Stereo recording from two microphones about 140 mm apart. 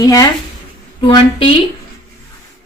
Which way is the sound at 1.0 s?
35° left (ahead or behind).